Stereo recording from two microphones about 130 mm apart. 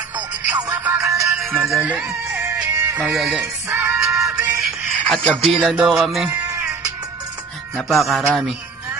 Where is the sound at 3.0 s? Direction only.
5° right (ahead or behind).